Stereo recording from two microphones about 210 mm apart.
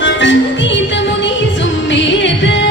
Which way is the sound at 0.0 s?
60° left (ahead or behind).